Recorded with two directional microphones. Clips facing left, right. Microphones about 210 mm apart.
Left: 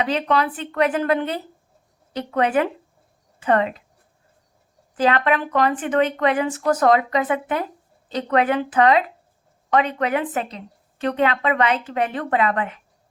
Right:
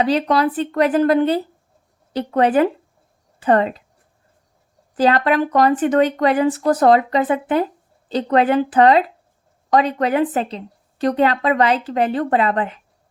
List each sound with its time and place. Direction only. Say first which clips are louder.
0.0 s a woman's voice: right 4 dB; 35° right (ahead or behind)
4.9 s a woman's voice: right 4 dB; 35° right (ahead or behind)